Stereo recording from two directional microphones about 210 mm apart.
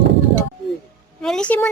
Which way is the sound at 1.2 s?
5° left (ahead or behind).